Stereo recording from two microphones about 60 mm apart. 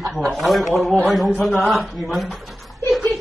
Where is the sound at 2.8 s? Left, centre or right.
Centre.